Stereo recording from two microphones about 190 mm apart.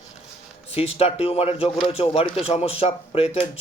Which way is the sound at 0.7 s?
30° left (ahead or behind).